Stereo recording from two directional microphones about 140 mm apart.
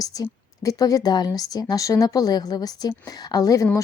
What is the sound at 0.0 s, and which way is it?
A woman's voice, 25° left (ahead or behind).